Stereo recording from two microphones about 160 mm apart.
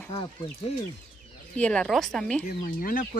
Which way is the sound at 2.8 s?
65° left (ahead or behind).